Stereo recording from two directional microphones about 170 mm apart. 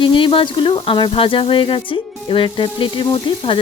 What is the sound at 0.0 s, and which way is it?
Sizzle, 30° left (ahead or behind).